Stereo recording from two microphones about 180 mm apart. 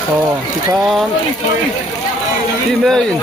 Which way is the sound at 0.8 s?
Centre (ahead or behind).